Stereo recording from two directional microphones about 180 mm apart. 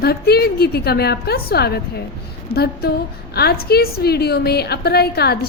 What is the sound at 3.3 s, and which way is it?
A woman's voice, 60° left (ahead or behind).